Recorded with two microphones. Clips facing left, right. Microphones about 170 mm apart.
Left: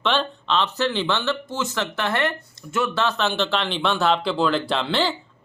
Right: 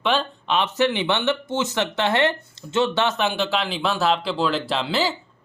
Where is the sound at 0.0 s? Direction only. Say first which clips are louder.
Even; 10° right (ahead or behind).